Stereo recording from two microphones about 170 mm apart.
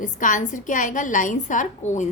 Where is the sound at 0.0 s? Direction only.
50° left (ahead or behind).